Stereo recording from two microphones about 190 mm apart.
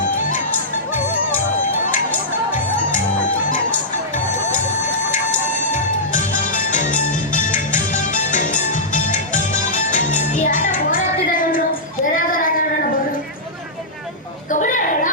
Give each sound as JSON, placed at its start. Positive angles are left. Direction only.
{"t": 2.0, "sound": "music", "side_deg": 10}
{"t": 5.7, "sound": "music", "side_deg": 40}
{"t": 14.5, "sound": "a sound", "side_deg": 45}